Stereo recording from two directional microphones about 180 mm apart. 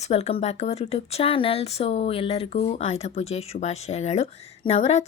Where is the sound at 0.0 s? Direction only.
35° left (ahead or behind).